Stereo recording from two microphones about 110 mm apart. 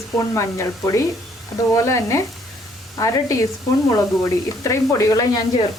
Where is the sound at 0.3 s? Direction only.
25° left (ahead or behind).